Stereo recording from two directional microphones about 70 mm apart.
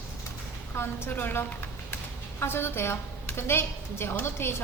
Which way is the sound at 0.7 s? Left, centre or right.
Left.